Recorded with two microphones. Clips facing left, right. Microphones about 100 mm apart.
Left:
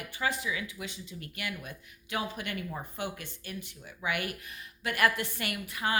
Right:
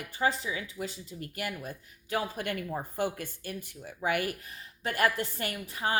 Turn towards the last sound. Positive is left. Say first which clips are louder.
# even
turn(degrees=-30)  # may be behind; listen again after turning